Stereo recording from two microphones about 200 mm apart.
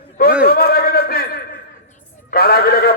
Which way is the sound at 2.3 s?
50° left (ahead or behind).